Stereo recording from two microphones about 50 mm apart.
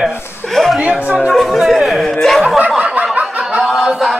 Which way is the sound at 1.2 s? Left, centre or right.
Centre.